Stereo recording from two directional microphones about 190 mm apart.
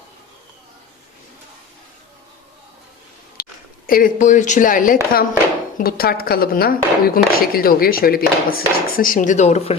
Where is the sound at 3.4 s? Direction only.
55° left (ahead or behind).